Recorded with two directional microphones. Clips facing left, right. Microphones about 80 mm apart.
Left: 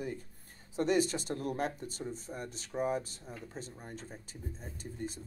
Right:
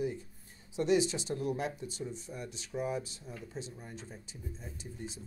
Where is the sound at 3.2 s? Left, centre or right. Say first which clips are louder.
Even; centre.